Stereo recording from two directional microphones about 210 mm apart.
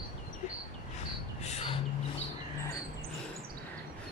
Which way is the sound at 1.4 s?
30° left (ahead or behind).